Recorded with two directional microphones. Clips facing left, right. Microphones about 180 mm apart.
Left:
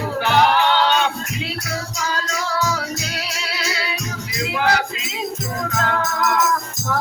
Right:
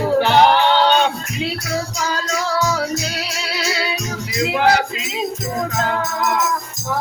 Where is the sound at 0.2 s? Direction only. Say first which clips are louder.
Right 1 dB; 35° right (ahead or behind).